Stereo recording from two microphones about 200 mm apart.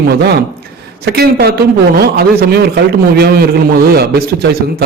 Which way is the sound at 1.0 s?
50° right (ahead or behind).